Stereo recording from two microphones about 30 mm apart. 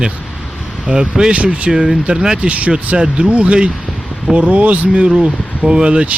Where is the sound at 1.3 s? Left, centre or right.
Right.